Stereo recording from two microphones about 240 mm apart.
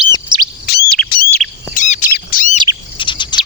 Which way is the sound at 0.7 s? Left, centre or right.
Left.